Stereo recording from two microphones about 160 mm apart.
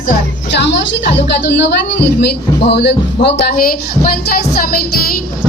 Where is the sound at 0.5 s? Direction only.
90° left; by 4.2 s 65° left (ahead or behind).